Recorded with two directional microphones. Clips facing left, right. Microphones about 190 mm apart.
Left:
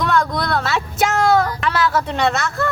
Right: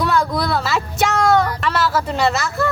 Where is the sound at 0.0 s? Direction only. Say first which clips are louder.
Even; 5° right (ahead or behind).